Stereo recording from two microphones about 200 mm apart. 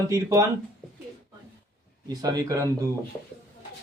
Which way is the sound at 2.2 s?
20° right (ahead or behind).